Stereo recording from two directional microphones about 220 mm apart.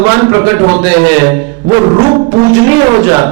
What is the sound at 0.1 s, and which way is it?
A man's voice, 15° right (ahead or behind).